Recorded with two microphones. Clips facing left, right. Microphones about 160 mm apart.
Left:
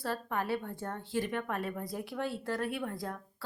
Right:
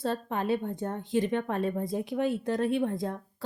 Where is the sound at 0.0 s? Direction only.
20° right (ahead or behind).